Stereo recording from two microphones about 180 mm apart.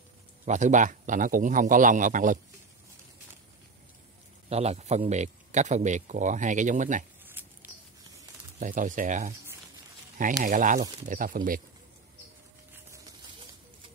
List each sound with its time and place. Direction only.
0.5 s a man's voice: 45° right (ahead or behind)
4.5 s a man's voice: 35° right (ahead or behind)
7.4 s a sound: 10° right (ahead or behind)
8.5 s a man's voice: 45° right (ahead or behind)
10.4 s a man's voice: 45° right (ahead or behind)